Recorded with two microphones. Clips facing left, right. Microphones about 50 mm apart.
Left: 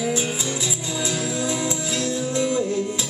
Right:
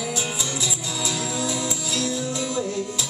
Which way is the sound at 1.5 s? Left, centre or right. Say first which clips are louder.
Left 2 dB; left.